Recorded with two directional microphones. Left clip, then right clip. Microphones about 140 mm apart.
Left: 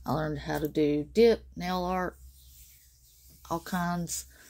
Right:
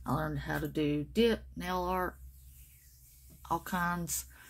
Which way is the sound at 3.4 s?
40° left (ahead or behind).